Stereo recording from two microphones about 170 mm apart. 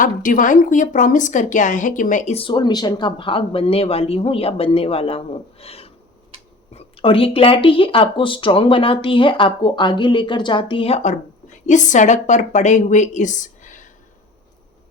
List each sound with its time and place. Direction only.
0.0 s speech: 50° left (ahead or behind); by 5.9 s 35° left (ahead or behind)
6.3 s a sound: 30° right (ahead or behind)
6.7 s speech: 35° left (ahead or behind); by 13.9 s 50° left (ahead or behind)